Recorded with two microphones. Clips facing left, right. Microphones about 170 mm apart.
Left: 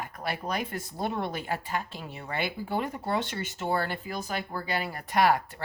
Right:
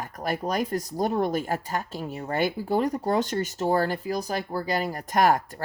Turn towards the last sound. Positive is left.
turn(degrees=-45)  # may be behind; listen again after turning